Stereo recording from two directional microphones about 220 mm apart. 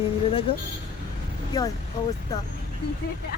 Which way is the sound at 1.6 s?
15° left (ahead or behind).